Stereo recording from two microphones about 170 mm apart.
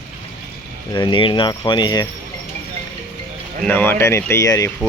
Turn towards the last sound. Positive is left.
turn(degrees=20)  # may be behind; listen again after turning